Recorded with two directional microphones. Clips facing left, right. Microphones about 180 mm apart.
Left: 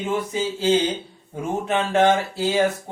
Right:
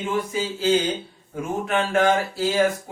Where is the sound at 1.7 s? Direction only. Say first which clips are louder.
Left 2 dB; 20° left (ahead or behind).